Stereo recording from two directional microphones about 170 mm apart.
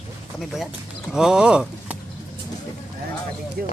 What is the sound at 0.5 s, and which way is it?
Speech, 5° right (ahead or behind).